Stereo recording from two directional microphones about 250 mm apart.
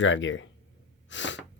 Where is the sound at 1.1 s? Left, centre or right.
Left.